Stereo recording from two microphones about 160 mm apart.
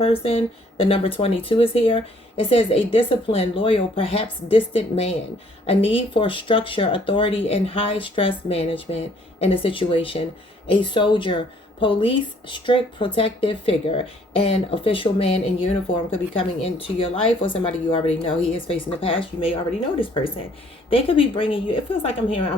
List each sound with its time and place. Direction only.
0.0 s speech: 35° left (ahead or behind)